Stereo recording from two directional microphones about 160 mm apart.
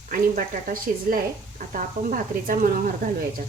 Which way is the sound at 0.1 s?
60° right (ahead or behind).